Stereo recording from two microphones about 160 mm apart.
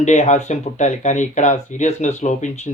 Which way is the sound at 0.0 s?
45° left (ahead or behind).